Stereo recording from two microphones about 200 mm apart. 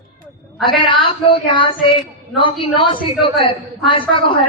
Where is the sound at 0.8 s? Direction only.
25° left (ahead or behind).